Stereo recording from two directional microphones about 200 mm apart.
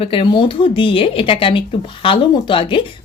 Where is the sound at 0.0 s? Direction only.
25° left (ahead or behind).